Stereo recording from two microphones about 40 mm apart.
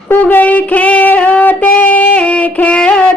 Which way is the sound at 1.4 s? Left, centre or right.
Left.